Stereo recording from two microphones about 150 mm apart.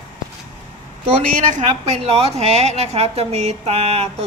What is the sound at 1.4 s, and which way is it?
Speech, 55° right (ahead or behind).